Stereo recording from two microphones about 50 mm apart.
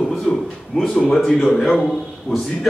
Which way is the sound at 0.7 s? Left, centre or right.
Centre.